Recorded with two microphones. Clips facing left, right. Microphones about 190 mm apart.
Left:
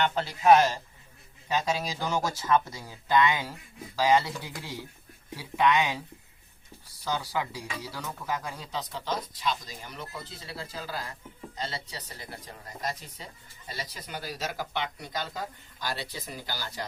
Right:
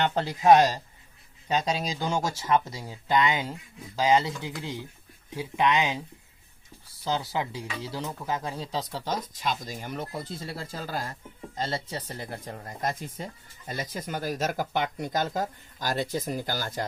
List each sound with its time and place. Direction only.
0.3 s speech: 25° right (ahead or behind)
1.5 s speech: 20° right (ahead or behind)
7.0 s speech: 25° right (ahead or behind); by 16.8 s 50° right (ahead or behind)